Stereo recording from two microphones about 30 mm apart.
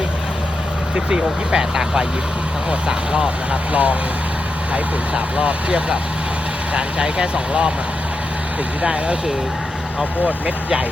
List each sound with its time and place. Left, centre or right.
0.9 s speech: right
2.6 s speech: right
3.5 s speech: right
8.8 s speech: right